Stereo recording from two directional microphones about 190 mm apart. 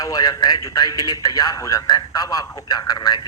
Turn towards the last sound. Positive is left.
turn(degrees=20)  # may be behind; listen again after turning